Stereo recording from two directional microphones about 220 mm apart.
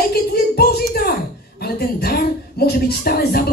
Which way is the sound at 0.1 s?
45° left (ahead or behind).